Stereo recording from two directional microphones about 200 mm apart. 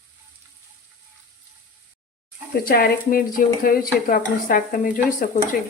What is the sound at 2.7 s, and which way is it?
Speech, 50° left (ahead or behind).